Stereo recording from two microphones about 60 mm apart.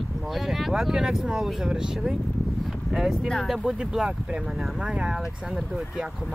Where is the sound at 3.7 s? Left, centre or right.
Centre.